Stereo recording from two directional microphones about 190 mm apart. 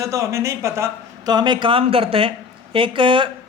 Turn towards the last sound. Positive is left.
turn(degrees=-25)  # may be behind; listen again after turning